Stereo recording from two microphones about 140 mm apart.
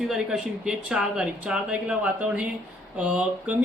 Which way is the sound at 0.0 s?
5° right (ahead or behind).